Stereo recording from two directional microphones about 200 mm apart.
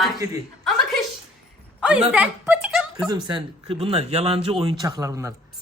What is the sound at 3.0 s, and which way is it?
Speech, 20° right (ahead or behind).